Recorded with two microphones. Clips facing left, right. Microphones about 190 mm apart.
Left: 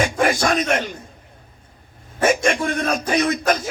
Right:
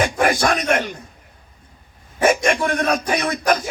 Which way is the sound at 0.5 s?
55° right (ahead or behind).